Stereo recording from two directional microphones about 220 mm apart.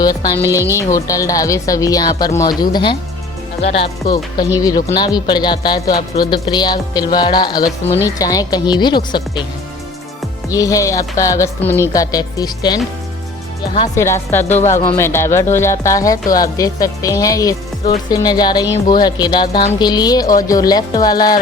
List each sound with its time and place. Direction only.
0.8 s speech: 15° left (ahead or behind)
10.5 s speech: 15° left (ahead or behind)
13.9 s speech: 10° left (ahead or behind)